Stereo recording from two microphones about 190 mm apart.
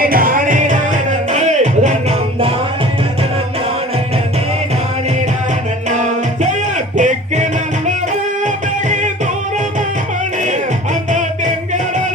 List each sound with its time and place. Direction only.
0.0 s music: 50° right (ahead or behind)
5.9 s music: 40° right (ahead or behind)
11.1 s music: 40° right (ahead or behind)